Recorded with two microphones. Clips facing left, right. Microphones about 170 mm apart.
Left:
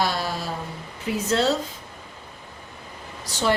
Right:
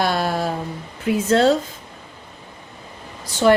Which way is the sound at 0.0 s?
55° right (ahead or behind).